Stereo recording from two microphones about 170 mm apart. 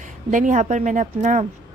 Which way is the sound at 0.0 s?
50° right (ahead or behind).